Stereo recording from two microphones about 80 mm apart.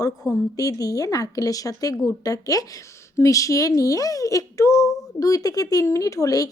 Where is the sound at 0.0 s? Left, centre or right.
Left.